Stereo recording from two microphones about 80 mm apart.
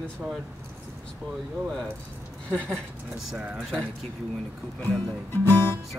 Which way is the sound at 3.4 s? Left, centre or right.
Centre.